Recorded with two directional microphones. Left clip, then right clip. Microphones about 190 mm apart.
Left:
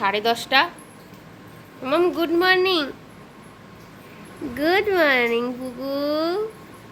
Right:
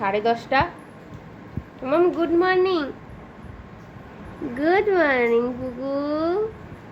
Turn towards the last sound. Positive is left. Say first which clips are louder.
# left 1 dB
turn(degrees=10)  # may be behind; listen again after turning